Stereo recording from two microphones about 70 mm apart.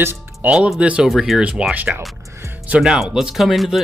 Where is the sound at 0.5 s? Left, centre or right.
Centre.